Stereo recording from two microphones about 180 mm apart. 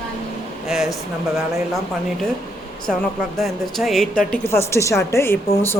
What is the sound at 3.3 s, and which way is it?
A woman's voice, centre (ahead or behind).